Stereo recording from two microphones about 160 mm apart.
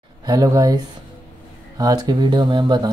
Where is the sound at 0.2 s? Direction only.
25° right (ahead or behind).